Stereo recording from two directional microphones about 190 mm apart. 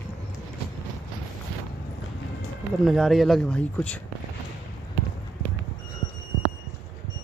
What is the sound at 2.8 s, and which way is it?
Speech, centre (ahead or behind).